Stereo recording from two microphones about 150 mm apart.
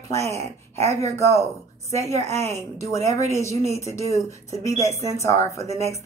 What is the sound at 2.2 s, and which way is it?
A woman's voice, 20° left (ahead or behind).